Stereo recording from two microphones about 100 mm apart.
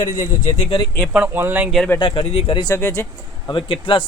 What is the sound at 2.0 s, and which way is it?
Speech, 65° left (ahead or behind).